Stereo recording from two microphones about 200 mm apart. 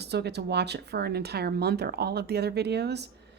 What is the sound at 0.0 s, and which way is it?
Speech, 55° right (ahead or behind).